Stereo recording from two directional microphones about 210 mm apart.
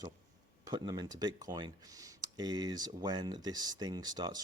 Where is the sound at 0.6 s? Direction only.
20° right (ahead or behind).